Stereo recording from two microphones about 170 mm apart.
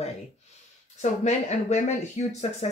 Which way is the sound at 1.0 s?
40° left (ahead or behind).